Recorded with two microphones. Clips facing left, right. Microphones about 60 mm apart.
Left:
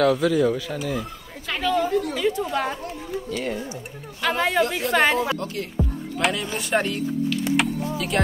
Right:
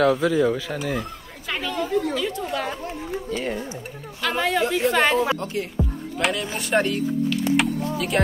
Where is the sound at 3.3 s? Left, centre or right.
Right.